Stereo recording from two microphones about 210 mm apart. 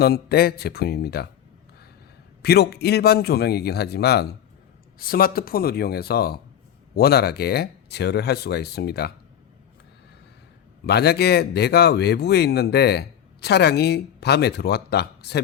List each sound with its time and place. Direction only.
0.0 s speech: 50° left (ahead or behind)
2.4 s speech: 50° left (ahead or behind)
10.8 s speech: 50° left (ahead or behind)